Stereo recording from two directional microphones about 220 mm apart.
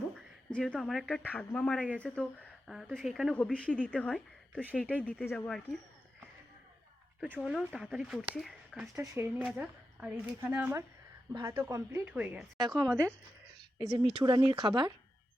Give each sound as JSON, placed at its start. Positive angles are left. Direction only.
{"t": 0.5, "sound": "speech", "side_deg": 5}
{"t": 7.3, "sound": "speech", "side_deg": 0}
{"t": 12.7, "sound": "speech", "side_deg": -15}
{"t": 14.2, "sound": "speech", "side_deg": -20}